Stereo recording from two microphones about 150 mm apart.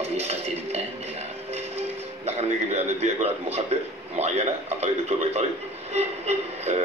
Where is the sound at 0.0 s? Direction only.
45° right (ahead or behind).